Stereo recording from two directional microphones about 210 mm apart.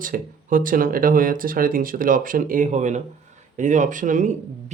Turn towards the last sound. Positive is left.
turn(degrees=-35)  # may be behind; listen again after turning